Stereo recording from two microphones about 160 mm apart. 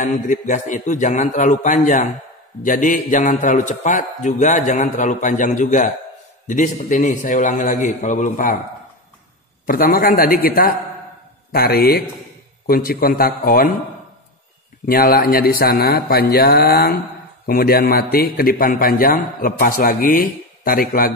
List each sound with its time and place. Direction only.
0.0 s a man's voice: 50° left (ahead or behind)
9.7 s a man's voice: 65° left (ahead or behind)
14.9 s a man's voice: 70° left (ahead or behind)